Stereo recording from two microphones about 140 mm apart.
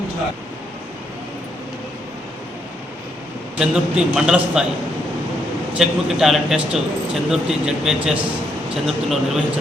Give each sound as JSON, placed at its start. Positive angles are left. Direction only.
{"t": 3.6, "sound": "speech", "side_deg": -5}
{"t": 5.7, "sound": "speech", "side_deg": -5}